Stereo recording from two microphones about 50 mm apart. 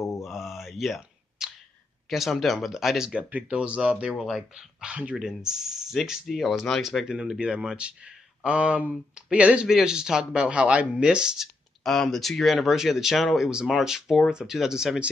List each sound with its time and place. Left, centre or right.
0.2 s a sound: centre
2.0 s speech: centre
3.2 s speech: right
3.4 s speech: right
9.7 s speech: centre
11.0 s speech: centre
11.8 s speech: centre
13.5 s speech: centre